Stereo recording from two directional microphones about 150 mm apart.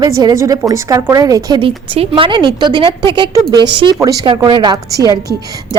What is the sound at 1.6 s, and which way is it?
A woman's voice, 35° right (ahead or behind).